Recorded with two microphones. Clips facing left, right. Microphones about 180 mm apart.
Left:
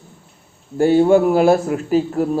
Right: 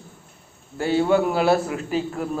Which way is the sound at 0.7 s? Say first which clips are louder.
Left 7 dB; 45° left (ahead or behind).